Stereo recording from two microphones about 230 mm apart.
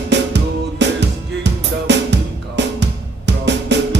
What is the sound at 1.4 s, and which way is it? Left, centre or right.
Music, right.